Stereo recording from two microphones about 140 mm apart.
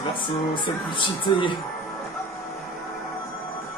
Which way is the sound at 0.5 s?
35° left (ahead or behind).